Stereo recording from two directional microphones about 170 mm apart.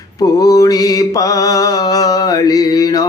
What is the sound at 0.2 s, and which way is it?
Mantra, 20° left (ahead or behind).